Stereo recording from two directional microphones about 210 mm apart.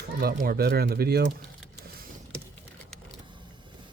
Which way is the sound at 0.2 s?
45° right (ahead or behind).